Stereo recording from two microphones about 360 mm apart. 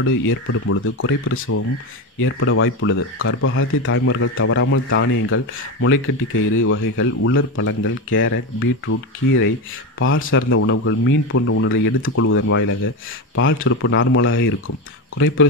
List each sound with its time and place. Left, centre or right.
0.0 s speech: left